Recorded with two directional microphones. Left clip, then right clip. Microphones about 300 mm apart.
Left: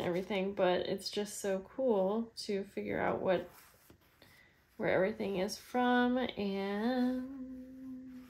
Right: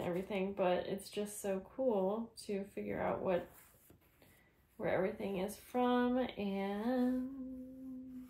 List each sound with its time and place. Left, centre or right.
0.0 s speech: left
4.7 s speech: left